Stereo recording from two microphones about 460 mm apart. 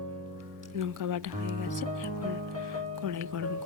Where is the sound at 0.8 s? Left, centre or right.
Right.